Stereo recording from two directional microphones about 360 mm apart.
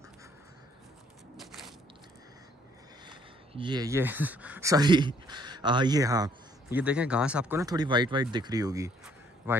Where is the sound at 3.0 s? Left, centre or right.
Centre.